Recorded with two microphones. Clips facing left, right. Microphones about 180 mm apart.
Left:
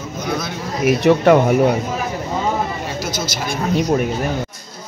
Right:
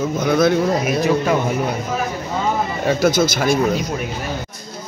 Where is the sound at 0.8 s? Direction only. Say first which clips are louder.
Left 4 dB; 65° left (ahead or behind).